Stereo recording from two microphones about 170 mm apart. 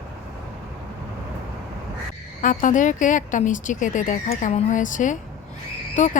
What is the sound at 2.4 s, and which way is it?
Speech, 50° left (ahead or behind).